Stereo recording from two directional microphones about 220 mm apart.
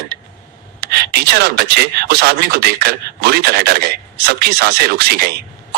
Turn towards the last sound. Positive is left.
turn(degrees=-45)  # may be behind; listen again after turning